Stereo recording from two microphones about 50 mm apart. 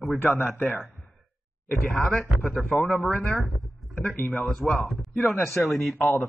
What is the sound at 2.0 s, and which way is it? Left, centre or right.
A man's voice, left.